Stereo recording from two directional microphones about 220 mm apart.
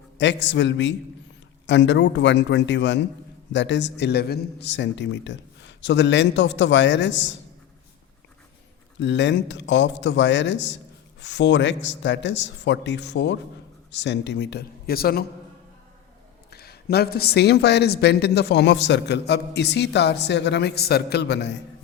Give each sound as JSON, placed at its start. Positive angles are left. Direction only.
{"t": 0.2, "sound": "a man's voice", "side_deg": 55}
{"t": 9.0, "sound": "a woman's voice", "side_deg": 55}
{"t": 16.5, "sound": "a woman's voice", "side_deg": 45}